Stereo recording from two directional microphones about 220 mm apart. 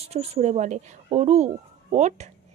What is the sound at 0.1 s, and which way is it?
A woman's voice, 30° right (ahead or behind).